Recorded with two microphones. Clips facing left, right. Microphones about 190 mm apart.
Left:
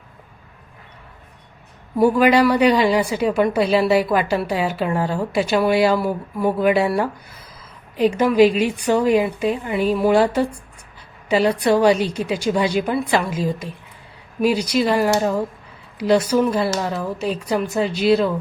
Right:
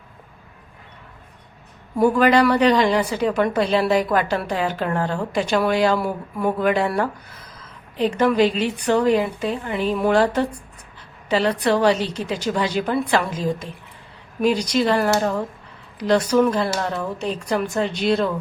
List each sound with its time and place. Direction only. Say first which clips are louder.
2.0 s a woman's voice: left 1 dB; 10° left (ahead or behind)